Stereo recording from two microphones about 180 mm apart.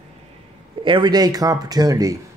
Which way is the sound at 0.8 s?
25° right (ahead or behind).